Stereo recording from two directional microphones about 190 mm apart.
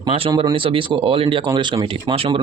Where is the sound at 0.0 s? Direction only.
25° right (ahead or behind).